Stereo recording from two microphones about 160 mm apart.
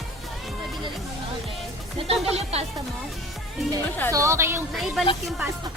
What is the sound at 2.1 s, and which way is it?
Speech, 40° right (ahead or behind).